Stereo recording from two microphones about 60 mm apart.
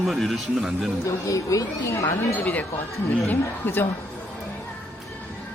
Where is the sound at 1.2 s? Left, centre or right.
Left.